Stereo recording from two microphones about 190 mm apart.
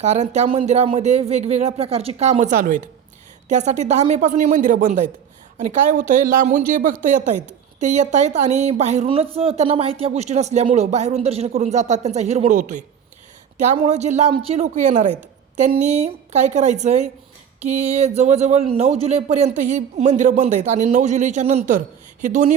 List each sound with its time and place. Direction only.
0.0 s a woman's voice: 35° right (ahead or behind)